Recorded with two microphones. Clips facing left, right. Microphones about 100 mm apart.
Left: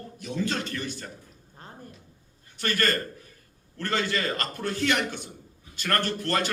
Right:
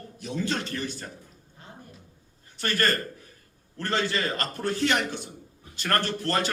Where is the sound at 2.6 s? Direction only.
40° right (ahead or behind).